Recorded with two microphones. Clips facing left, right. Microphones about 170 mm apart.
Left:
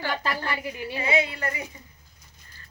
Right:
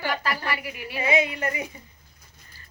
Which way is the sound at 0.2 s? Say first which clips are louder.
Even; 25° left (ahead or behind).